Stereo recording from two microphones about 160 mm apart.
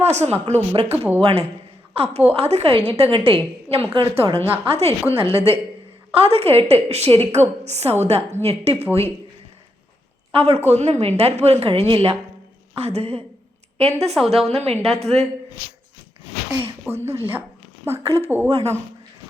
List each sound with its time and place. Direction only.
0.0 s a woman's voice: 45° right (ahead or behind)
0.9 s a woman's voice: 10° right (ahead or behind)
1.2 s a woman's voice: 40° right (ahead or behind)
4.4 s a woman's voice: 10° right (ahead or behind)
4.7 s a woman's voice: 40° right (ahead or behind)
10.3 s a woman's voice: 40° right (ahead or behind)
16.5 s a woman's voice: 10° right (ahead or behind)